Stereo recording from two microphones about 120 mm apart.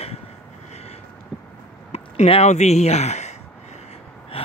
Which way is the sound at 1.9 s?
65° left (ahead or behind).